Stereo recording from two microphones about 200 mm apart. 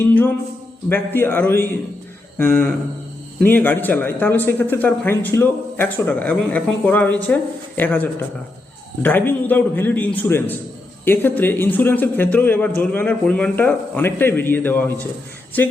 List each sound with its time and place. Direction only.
0.0 s a man's voice: 10° left (ahead or behind)